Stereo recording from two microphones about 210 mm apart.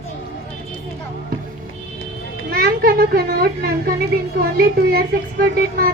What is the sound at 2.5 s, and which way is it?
A child's voice, 45° right (ahead or behind).